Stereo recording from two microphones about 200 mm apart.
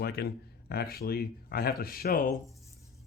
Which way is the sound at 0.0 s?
55° left (ahead or behind).